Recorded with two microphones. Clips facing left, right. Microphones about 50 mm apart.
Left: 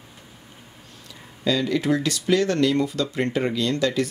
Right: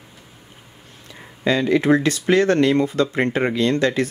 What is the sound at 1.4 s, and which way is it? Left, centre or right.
Speech, right.